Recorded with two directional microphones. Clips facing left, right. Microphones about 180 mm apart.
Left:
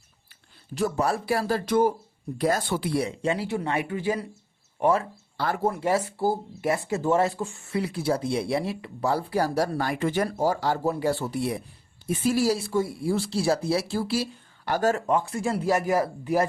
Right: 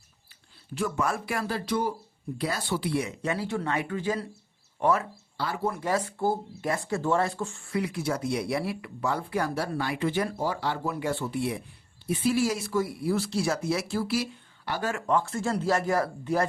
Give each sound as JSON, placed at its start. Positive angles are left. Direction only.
{"t": 0.7, "sound": "speech", "side_deg": 40}
{"t": 3.3, "sound": "speech", "side_deg": 15}
{"t": 5.4, "sound": "speech", "side_deg": 50}
{"t": 5.8, "sound": "speech", "side_deg": 10}
{"t": 14.6, "sound": "speech", "side_deg": 45}
{"t": 15.0, "sound": "speech", "side_deg": 20}